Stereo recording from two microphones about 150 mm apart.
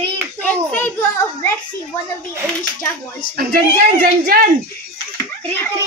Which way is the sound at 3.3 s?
80° right.